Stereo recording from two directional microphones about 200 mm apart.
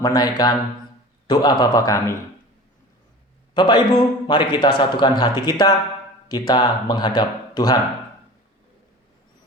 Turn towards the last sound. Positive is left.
turn(degrees=20)  # may be behind; listen again after turning